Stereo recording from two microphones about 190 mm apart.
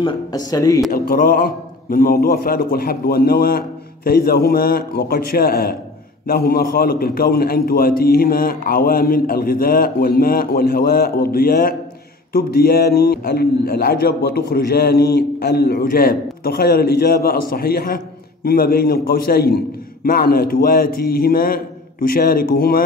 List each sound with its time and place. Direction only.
0.0 s speech: 20° left (ahead or behind)
0.9 s a man's voice: 50° left (ahead or behind)